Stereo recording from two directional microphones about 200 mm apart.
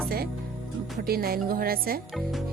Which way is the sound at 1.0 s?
50° right (ahead or behind).